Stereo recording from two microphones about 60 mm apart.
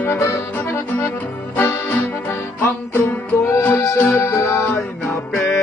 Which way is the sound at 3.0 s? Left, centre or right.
Left.